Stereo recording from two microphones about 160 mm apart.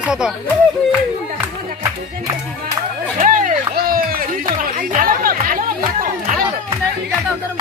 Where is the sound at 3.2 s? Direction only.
55° right (ahead or behind).